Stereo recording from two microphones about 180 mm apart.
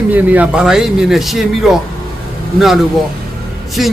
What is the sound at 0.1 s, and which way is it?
A man's voice, 10° right (ahead or behind).